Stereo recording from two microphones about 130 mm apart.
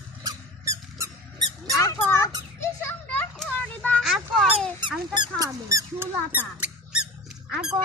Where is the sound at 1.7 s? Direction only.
25° left (ahead or behind).